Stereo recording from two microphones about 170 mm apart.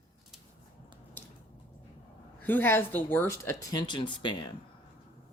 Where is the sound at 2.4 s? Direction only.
10° left (ahead or behind); by 4.5 s 25° left (ahead or behind).